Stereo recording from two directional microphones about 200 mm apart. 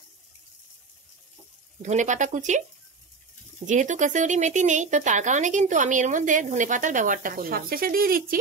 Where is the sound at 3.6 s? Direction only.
40° right (ahead or behind).